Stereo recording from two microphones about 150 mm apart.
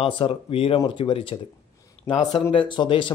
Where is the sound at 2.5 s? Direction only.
35° left (ahead or behind).